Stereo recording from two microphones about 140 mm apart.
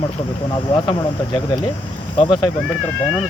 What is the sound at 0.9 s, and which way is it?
Speech, 40° left (ahead or behind).